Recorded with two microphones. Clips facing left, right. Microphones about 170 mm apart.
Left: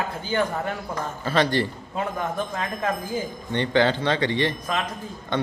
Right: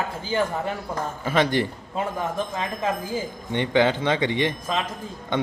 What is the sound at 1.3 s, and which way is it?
A man's voice, 15° right (ahead or behind).